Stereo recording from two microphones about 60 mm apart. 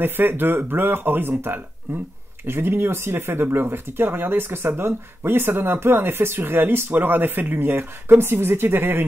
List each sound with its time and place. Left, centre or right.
0.0 s speech: right
2.4 s speech: right